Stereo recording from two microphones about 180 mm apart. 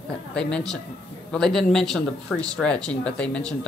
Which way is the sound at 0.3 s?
5° left (ahead or behind).